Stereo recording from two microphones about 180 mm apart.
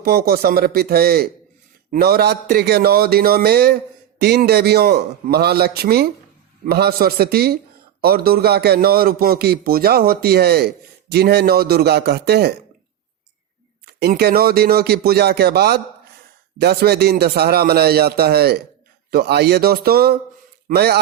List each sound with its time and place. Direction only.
0.0 s a man's voice: 55° right (ahead or behind)
14.0 s a man's voice: 60° right (ahead or behind)